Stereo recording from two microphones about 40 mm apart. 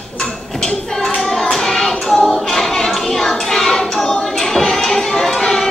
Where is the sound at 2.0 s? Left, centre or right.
Centre.